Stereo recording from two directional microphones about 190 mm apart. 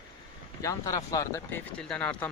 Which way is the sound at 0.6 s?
15° left (ahead or behind).